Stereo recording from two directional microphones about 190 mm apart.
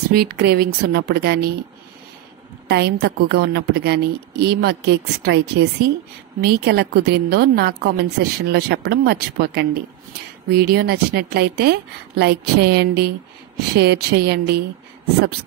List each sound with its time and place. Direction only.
0.1 s a woman's voice: 55° right (ahead or behind)
2.7 s a woman's voice: 60° right (ahead or behind)